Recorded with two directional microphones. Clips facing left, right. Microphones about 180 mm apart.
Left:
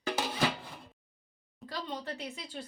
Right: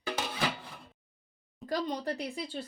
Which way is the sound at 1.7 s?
40° right (ahead or behind).